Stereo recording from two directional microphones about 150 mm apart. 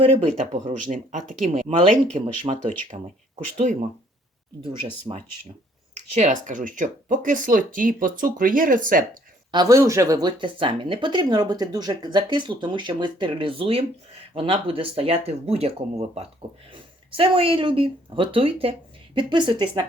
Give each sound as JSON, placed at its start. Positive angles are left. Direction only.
{"t": 0.0, "sound": "speech", "side_deg": -40}
{"t": 0.3, "sound": "speech", "side_deg": -55}
{"t": 2.1, "sound": "speech", "side_deg": -40}
{"t": 3.6, "sound": "speech", "side_deg": -55}
{"t": 4.6, "sound": "speech", "side_deg": -30}
{"t": 6.1, "sound": "speech", "side_deg": -55}
{"t": 9.5, "sound": "speech", "side_deg": -25}